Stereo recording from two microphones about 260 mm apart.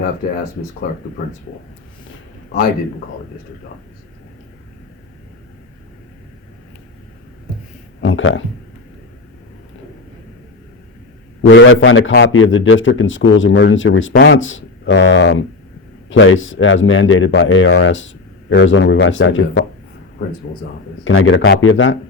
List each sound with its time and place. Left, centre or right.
8.0 s a sound: left
11.4 s a man's voice: left
21.0 s a man's voice: left